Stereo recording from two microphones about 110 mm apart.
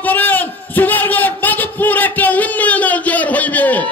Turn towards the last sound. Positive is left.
turn(degrees=15)  # may be behind; listen again after turning